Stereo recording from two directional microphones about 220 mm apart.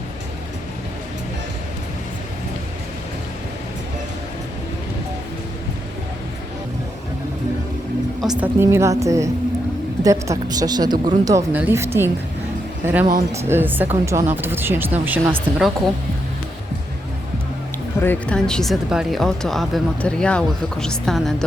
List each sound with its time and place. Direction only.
8.2 s speech: centre (ahead or behind)
8.6 s speech: 10° right (ahead or behind)
18.0 s speech: 5° left (ahead or behind)